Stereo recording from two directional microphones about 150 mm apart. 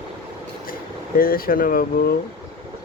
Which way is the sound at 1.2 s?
75° left (ahead or behind).